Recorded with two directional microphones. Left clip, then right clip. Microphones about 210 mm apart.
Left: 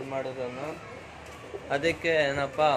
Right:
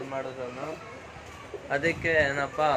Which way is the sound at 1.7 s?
5° left (ahead or behind).